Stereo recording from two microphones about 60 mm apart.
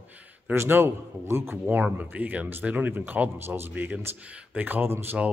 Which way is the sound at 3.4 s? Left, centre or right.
Right.